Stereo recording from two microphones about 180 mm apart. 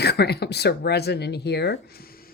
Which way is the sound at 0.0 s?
65° left (ahead or behind).